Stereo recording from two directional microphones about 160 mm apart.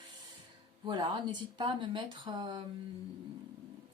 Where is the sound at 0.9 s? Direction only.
30° right (ahead or behind).